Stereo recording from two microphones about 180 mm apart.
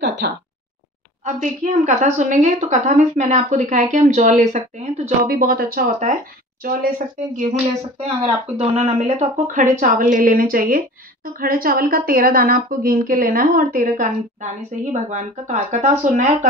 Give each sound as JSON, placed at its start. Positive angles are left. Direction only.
{"t": 0.0, "sound": "speech", "side_deg": -70}
{"t": 1.2, "sound": "a woman's voice", "side_deg": -45}
{"t": 5.2, "sound": "a woman's voice", "side_deg": -55}
{"t": 8.0, "sound": "a woman's voice", "side_deg": -35}